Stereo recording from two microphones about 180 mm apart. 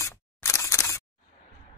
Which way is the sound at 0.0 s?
15° left (ahead or behind).